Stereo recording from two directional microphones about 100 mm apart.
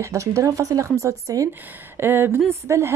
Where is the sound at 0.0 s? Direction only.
30° right (ahead or behind).